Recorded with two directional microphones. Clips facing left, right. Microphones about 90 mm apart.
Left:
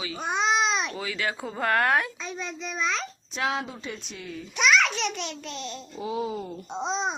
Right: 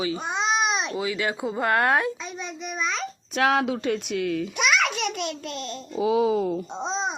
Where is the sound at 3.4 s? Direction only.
65° right (ahead or behind).